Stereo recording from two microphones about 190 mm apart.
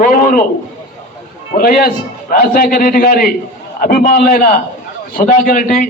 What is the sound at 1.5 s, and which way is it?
A man's voice, 50° left (ahead or behind).